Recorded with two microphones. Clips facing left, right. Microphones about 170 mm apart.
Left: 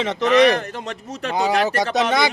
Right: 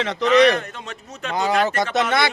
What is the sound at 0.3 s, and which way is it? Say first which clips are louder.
Speech: even; 50° left (ahead or behind).